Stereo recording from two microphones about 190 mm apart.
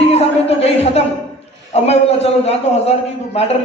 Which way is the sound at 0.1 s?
35° left (ahead or behind).